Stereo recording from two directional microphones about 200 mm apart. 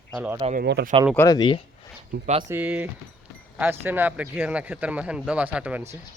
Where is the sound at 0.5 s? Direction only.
50° right (ahead or behind).